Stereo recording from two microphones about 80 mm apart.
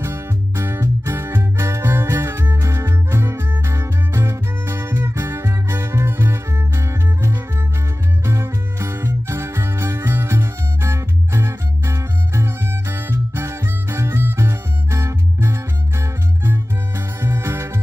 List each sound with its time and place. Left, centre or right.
0.0 s music: right